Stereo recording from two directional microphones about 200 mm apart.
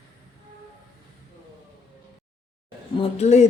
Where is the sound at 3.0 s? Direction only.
35° left (ahead or behind).